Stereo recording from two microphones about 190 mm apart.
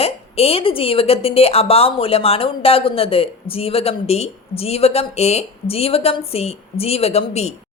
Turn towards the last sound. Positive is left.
turn(degrees=35)  # may be behind; listen again after turning